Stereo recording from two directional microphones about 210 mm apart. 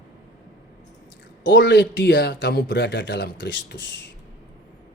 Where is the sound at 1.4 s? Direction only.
55° left (ahead or behind).